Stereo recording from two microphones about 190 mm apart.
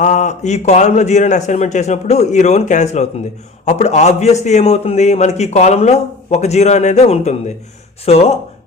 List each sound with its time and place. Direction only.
0.0 s a man's voice: 40° left (ahead or behind)